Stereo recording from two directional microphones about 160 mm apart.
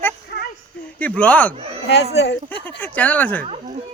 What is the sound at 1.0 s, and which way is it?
Speech, 10° left (ahead or behind).